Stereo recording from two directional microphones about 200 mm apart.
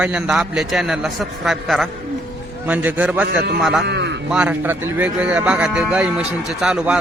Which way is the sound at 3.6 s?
Centre (ahead or behind).